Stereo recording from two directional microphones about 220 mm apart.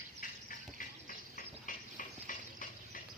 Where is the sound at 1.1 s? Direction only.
35° left (ahead or behind).